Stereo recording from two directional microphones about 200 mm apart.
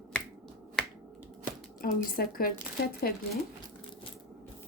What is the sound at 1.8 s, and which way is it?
Speech, 45° left (ahead or behind).